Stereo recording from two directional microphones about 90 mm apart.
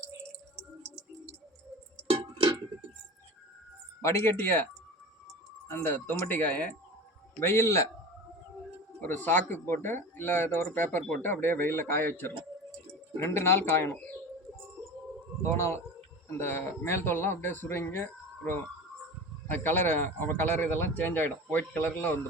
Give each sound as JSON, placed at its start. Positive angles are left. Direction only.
{"t": 2.0, "sound": "a sound", "side_deg": -70}
{"t": 4.0, "sound": "speech", "side_deg": 30}
{"t": 5.7, "sound": "speech", "side_deg": 20}
{"t": 9.0, "sound": "speech", "side_deg": 20}
{"t": 15.4, "sound": "speech", "side_deg": 30}